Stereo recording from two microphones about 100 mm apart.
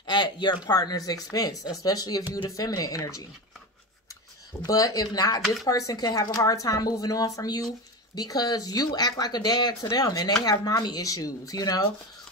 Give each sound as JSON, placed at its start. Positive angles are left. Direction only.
{"t": 0.0, "sound": "a sound", "side_deg": 45}
{"t": 0.7, "sound": "speech", "side_deg": 40}
{"t": 4.6, "sound": "speech", "side_deg": 35}